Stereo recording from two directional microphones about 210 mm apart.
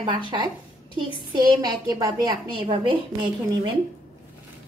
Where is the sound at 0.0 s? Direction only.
20° right (ahead or behind).